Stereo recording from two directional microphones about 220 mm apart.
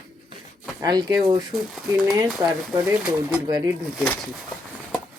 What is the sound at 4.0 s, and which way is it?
Speech, centre (ahead or behind).